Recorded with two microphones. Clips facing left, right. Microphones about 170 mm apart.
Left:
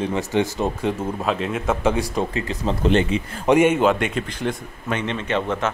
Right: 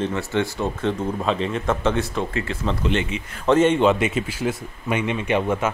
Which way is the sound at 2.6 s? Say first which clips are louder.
Left 6 dB; 40° left (ahead or behind).